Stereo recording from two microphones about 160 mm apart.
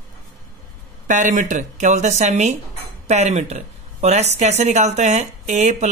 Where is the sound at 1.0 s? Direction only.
55° right (ahead or behind).